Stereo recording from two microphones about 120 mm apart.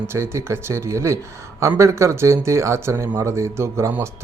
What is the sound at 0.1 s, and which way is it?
Speech, 20° right (ahead or behind).